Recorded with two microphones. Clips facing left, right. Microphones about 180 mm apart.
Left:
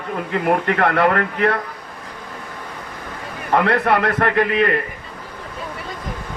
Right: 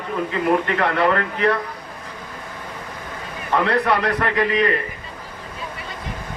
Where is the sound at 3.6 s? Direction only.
50° left (ahead or behind).